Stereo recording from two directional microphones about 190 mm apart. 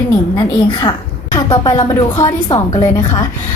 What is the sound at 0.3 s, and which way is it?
Speech, 25° left (ahead or behind).